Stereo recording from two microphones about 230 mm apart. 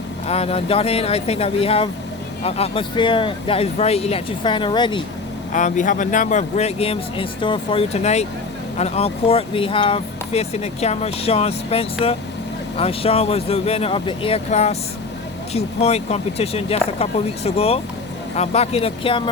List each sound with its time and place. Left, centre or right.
0.3 s speech: left
5.5 s speech: left